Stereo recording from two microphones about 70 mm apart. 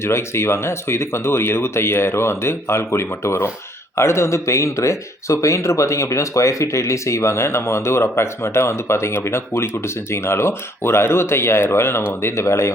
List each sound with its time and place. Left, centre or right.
0.0 s speech: left